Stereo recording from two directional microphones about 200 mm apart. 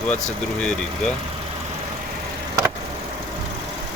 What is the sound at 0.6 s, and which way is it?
Speech, 5° left (ahead or behind).